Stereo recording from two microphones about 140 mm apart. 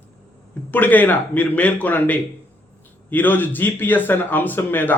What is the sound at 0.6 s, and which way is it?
A man's voice, 15° left (ahead or behind).